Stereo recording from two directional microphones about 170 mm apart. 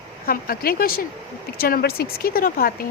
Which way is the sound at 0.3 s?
60° left (ahead or behind).